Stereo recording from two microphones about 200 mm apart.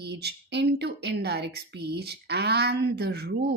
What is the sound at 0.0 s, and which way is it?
A woman's voice, 55° right (ahead or behind).